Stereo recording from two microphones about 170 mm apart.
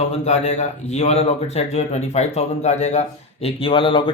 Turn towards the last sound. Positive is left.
turn(degrees=30)  # may be behind; listen again after turning